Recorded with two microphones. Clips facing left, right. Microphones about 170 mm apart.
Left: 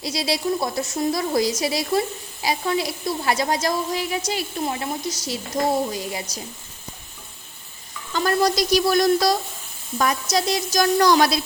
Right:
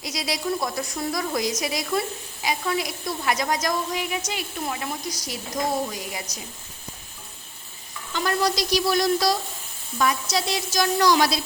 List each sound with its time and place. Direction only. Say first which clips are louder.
0.0 s a woman's voice: left 4 dB; 30° left (ahead or behind)
8.1 s a woman's voice: left 4 dB; 45° left (ahead or behind)